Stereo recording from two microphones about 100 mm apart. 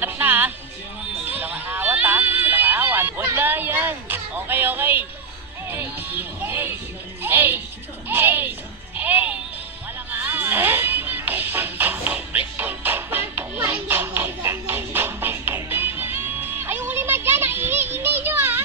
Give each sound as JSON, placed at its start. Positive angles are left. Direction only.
{"t": 0.0, "sound": "music", "side_deg": -20}